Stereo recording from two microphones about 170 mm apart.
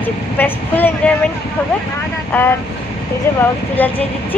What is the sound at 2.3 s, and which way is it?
Speech, 15° left (ahead or behind).